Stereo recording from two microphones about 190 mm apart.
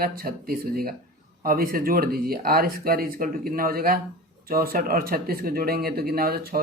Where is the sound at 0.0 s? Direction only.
50° right (ahead or behind).